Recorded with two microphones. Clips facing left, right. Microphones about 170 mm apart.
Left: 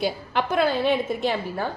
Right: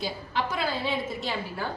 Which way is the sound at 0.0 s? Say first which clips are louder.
Left 5 dB; 65° left (ahead or behind).